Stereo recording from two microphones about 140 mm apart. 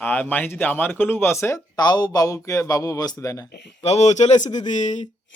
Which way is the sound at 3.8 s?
50° left (ahead or behind).